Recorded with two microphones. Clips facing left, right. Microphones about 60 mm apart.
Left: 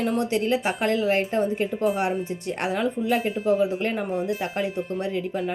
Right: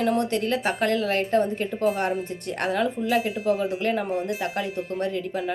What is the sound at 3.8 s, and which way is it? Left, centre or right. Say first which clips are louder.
Speech: right 2 dB; centre.